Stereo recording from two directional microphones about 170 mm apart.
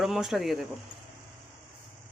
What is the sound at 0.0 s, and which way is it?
Speech, centre (ahead or behind).